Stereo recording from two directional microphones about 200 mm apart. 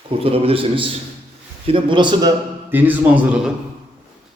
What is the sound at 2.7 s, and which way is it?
Speech, 10° right (ahead or behind).